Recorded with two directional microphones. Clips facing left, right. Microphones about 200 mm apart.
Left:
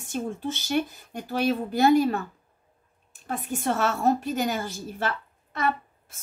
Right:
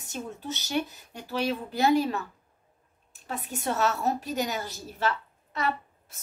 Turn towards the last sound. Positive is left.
turn(degrees=50)  # may be behind; listen again after turning